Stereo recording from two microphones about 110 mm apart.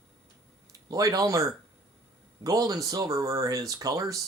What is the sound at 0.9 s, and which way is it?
Speech, 35° right (ahead or behind).